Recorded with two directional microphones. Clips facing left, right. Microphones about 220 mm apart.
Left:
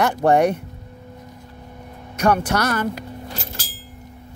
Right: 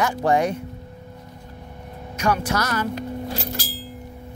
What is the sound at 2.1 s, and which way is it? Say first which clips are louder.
Speech: left 4 dB; 60° left (ahead or behind).